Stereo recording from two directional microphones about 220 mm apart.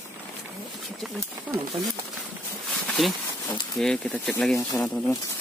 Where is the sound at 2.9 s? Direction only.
5° left (ahead or behind).